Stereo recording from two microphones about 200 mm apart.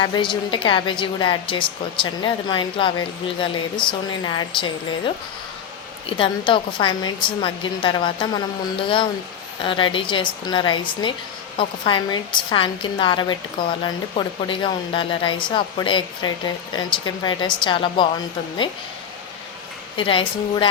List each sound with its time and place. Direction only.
0.0 s speech: 20° left (ahead or behind)
9.6 s speech: 25° left (ahead or behind)
20.0 s speech: 25° left (ahead or behind)